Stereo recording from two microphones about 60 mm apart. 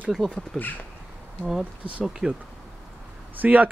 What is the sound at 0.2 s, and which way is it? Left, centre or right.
Speech, centre.